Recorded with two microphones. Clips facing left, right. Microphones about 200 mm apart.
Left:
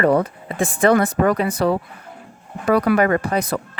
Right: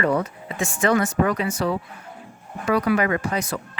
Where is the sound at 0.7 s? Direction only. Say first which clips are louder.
Left 4 dB; 55° left (ahead or behind).